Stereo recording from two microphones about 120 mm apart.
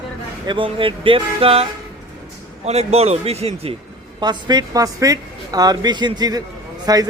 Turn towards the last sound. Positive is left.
turn(degrees=-30)  # may be behind; listen again after turning